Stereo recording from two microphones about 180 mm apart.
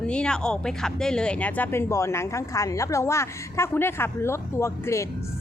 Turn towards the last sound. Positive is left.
turn(degrees=15)  # may be behind; listen again after turning